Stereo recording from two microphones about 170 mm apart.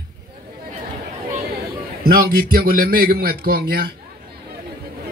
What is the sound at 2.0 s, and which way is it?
A man's voice, 60° right (ahead or behind).